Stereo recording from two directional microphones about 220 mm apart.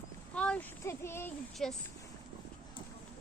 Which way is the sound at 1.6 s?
Centre (ahead or behind).